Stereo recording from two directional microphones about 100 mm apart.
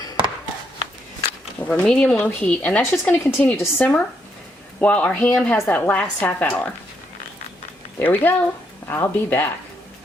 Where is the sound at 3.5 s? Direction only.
25° left (ahead or behind).